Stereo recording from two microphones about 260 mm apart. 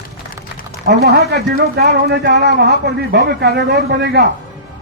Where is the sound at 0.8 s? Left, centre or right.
Right.